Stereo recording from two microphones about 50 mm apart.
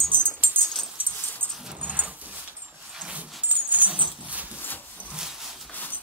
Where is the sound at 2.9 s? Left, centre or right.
Right.